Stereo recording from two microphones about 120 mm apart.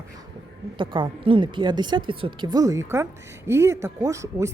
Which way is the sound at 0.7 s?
45° right (ahead or behind).